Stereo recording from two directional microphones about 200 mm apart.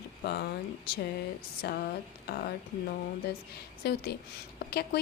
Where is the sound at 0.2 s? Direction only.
50° left (ahead or behind).